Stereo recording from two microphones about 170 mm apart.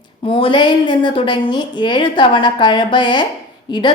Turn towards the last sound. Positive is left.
turn(degrees=25)  # may be behind; listen again after turning